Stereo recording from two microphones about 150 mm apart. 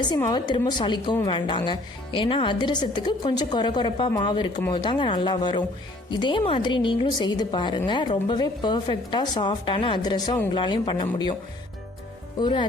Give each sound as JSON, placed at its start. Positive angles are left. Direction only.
{"t": 0.3, "sound": "a woman's voice", "side_deg": 30}
{"t": 12.4, "sound": "speech", "side_deg": 30}